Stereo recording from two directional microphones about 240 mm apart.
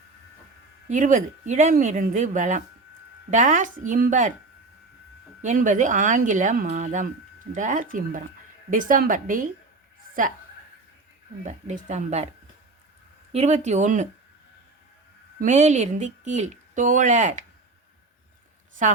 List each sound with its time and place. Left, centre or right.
0.9 s speech: right
5.4 s speech: right
11.4 s speech: right
13.3 s speech: right
15.4 s speech: right
18.8 s speech: right